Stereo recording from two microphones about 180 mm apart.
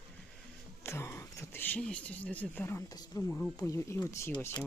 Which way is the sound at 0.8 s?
15° left (ahead or behind).